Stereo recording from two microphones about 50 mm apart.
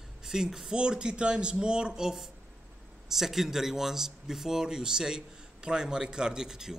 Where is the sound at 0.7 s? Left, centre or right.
Centre.